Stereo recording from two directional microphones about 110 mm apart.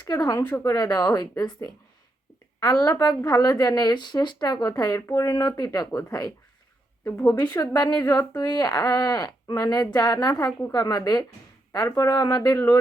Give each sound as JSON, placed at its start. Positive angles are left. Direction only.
{"t": 0.1, "sound": "a woman's voice", "side_deg": 40}
{"t": 8.0, "sound": "a woman's voice", "side_deg": 25}
{"t": 8.4, "sound": "speech", "side_deg": 35}
{"t": 12.5, "sound": "a woman's voice", "side_deg": 25}